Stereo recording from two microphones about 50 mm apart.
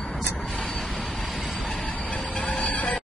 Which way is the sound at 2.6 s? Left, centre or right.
Left.